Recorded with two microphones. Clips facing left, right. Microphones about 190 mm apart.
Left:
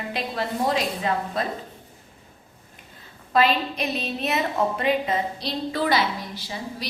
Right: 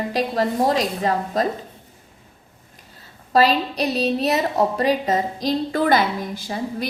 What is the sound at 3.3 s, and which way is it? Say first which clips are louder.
A woman's voice: right 4 dB; 40° right (ahead or behind).